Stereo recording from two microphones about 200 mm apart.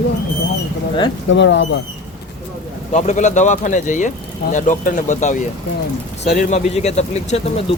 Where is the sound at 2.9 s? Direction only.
35° left (ahead or behind).